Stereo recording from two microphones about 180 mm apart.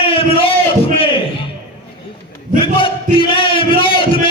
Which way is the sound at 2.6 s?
30° left (ahead or behind).